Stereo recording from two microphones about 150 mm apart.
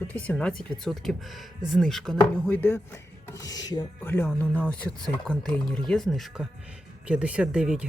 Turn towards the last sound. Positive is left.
turn(degrees=-5)  # may be behind; listen again after turning